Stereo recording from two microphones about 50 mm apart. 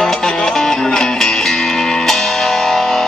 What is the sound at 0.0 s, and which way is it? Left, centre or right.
Music, centre.